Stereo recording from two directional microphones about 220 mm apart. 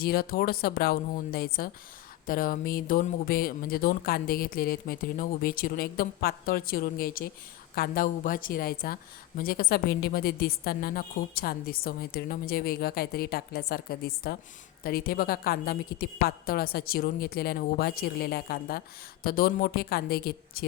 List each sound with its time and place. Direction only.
0.0 s a woman's voice: 45° left (ahead or behind)